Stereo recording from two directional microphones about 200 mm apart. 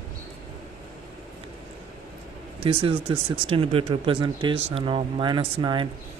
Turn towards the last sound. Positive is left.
turn(degrees=-25)  # may be behind; listen again after turning